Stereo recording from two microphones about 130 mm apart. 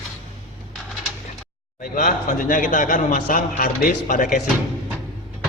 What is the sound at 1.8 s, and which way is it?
Speech, 90° left.